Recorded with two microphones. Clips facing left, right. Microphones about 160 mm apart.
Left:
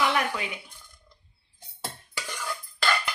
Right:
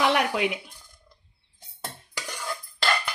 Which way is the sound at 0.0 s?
75° right (ahead or behind).